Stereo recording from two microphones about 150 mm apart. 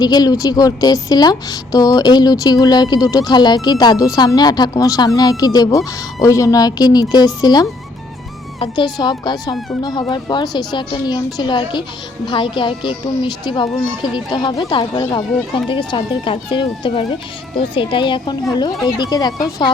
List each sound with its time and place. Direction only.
0.0 s a woman's voice: 25° left (ahead or behind)